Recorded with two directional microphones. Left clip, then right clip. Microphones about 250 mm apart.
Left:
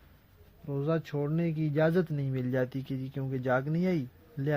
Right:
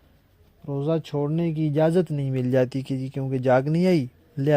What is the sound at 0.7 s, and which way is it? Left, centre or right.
Speech, right.